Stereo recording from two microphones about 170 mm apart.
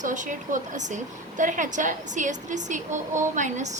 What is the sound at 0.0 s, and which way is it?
A woman's voice, 45° right (ahead or behind).